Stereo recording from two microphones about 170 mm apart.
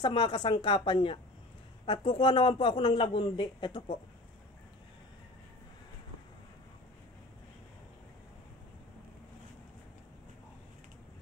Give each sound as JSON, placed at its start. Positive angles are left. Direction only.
{"t": 0.0, "sound": "speech", "side_deg": 25}